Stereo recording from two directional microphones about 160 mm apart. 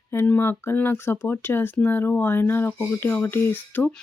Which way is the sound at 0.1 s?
15° left (ahead or behind).